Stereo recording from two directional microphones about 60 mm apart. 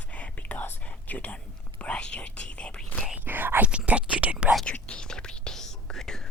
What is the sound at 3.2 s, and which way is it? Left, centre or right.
Whispering, right.